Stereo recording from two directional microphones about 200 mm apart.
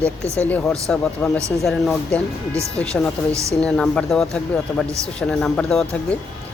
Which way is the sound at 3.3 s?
15° right (ahead or behind).